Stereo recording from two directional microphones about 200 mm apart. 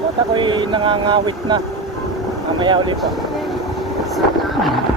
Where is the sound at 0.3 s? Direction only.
25° right (ahead or behind).